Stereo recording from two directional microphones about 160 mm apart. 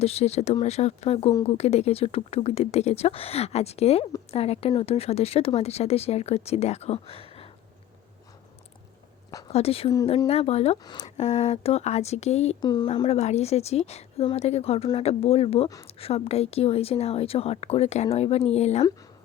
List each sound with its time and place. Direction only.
0.0 s a woman's voice: 40° left (ahead or behind)
9.5 s a woman's voice: 40° left (ahead or behind)
10.8 s speech: 25° left (ahead or behind)
11.2 s a woman's voice: 45° left (ahead or behind)
12.6 s speech: 25° left (ahead or behind)
13.1 s a woman's voice: 45° left (ahead or behind)